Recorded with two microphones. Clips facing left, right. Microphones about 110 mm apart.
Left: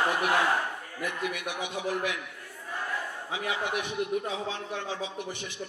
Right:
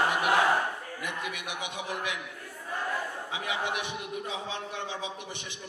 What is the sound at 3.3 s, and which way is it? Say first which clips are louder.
A man's voice: left 2 dB; 20° right (ahead or behind).